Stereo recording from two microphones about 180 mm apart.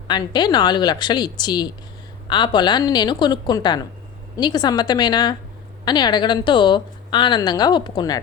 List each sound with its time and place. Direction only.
0.1 s a woman's voice: 25° left (ahead or behind)